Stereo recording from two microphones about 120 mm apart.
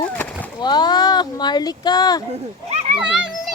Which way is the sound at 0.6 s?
35° left (ahead or behind).